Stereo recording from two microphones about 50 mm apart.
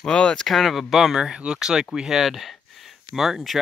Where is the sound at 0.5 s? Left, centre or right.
Centre.